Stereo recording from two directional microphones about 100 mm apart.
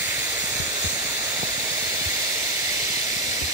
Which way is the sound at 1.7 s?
35° right (ahead or behind).